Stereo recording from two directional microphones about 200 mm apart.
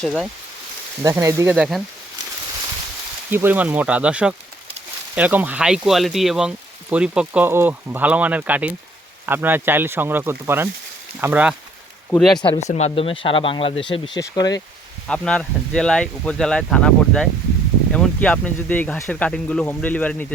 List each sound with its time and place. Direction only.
0.0 s speech: centre (ahead or behind)
1.0 s speech: 15° right (ahead or behind)
3.2 s speech: 10° right (ahead or behind)
12.4 s speech: 30° left (ahead or behind)
15.0 s speech: 5° left (ahead or behind)